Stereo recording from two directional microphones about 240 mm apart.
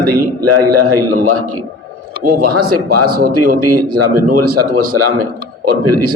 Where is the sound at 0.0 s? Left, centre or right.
Right.